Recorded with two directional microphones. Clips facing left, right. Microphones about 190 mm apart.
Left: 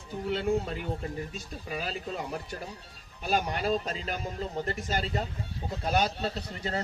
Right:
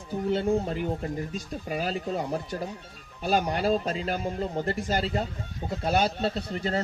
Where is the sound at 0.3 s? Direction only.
30° right (ahead or behind).